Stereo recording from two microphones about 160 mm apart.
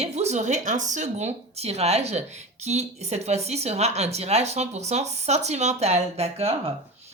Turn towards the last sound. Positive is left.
turn(degrees=-40)  # may be behind; listen again after turning